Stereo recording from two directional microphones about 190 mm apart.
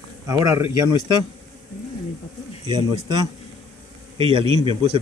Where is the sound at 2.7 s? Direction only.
25° right (ahead or behind).